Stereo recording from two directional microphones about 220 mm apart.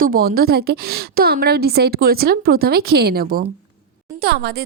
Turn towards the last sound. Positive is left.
turn(degrees=-45)  # may be behind; listen again after turning